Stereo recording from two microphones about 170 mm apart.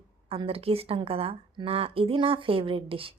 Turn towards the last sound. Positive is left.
turn(degrees=-30)  # may be behind; listen again after turning